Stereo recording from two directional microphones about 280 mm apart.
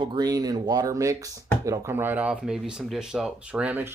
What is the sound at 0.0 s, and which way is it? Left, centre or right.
Speech, centre.